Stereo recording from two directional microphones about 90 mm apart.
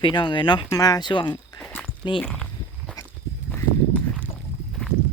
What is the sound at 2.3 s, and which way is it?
Walk, 5° left (ahead or behind).